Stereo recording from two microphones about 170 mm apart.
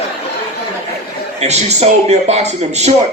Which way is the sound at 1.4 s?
40° right (ahead or behind).